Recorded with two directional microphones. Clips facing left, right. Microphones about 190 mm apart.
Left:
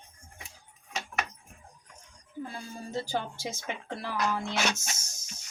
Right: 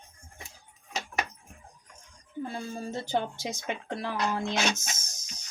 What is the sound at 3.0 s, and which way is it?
Speech, 20° right (ahead or behind).